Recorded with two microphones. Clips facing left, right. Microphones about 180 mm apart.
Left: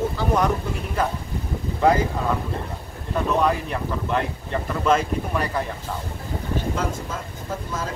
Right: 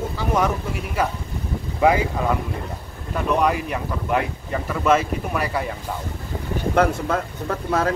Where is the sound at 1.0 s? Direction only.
10° right (ahead or behind).